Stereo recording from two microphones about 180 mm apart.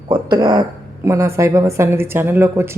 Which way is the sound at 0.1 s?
20° right (ahead or behind).